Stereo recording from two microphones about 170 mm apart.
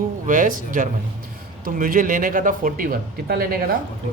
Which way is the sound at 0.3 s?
50° right (ahead or behind).